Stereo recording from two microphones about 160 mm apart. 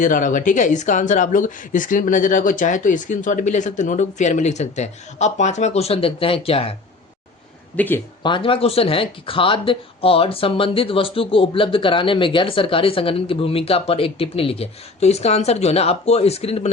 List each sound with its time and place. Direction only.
0.0 s speech: 55° left (ahead or behind); by 6.7 s 35° left (ahead or behind)
7.8 s speech: 15° left (ahead or behind)
8.2 s speech: 30° left (ahead or behind)